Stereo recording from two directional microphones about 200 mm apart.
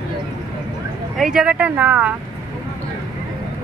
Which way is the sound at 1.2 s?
5° right (ahead or behind).